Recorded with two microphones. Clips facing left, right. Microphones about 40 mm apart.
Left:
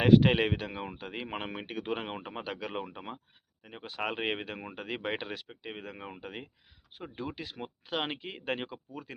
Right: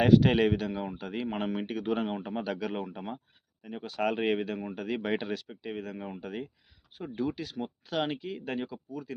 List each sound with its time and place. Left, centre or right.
0.1 s speech: left
0.9 s speech: left
4.4 s speech: left